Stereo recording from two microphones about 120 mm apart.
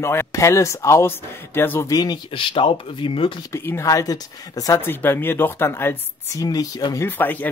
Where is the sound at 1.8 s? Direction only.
35° left (ahead or behind).